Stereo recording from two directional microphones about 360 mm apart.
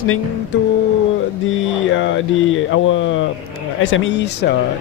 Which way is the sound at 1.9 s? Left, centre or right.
Left.